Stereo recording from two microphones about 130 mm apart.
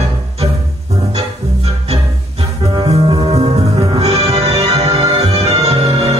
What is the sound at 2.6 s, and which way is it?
Music, 30° right (ahead or behind).